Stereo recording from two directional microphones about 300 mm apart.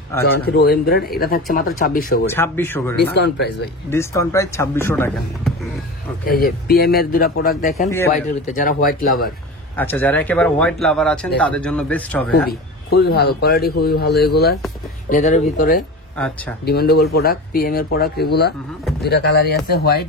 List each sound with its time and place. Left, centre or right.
0.5 s speech: left
2.2 s speech: centre
3.0 s speech: left
3.9 s speech: centre
6.2 s speech: left
9.8 s speech: centre
12.4 s speech: left
16.2 s speech: centre
16.6 s speech: left